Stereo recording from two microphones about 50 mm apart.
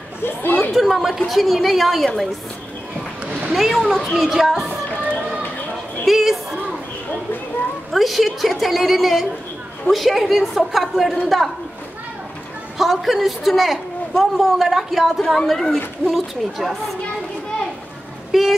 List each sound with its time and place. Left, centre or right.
0.2 s speech: left
0.7 s a man's voice: centre
3.3 s a sound: right
3.5 s a man's voice: centre
4.2 s music: centre
6.0 s a man's voice: centre
7.9 s a man's voice: centre
12.7 s a man's voice: centre
18.3 s a man's voice: centre